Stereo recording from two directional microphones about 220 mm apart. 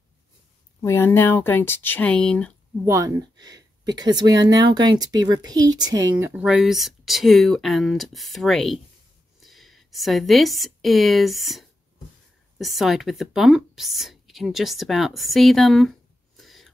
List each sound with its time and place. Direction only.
0.8 s speech: 10° left (ahead or behind)
2.8 s speech: 15° right (ahead or behind)